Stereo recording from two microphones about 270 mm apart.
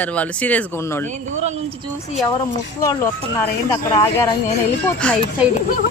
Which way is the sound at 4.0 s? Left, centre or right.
Centre.